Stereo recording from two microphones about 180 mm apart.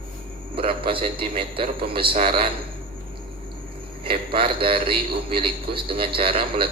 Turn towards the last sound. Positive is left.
turn(degrees=-30)  # may be behind; listen again after turning